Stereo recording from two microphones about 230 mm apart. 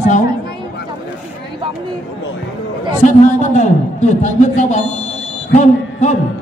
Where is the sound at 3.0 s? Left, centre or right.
Left.